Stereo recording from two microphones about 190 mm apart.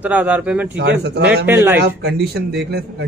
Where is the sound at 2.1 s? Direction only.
60° right (ahead or behind).